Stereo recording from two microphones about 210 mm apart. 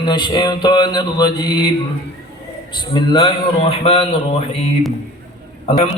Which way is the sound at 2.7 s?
20° left (ahead or behind).